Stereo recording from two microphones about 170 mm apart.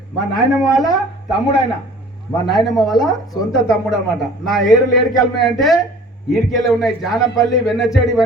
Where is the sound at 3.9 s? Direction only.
Centre (ahead or behind).